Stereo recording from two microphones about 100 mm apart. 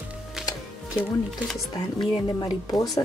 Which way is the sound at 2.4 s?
40° left (ahead or behind).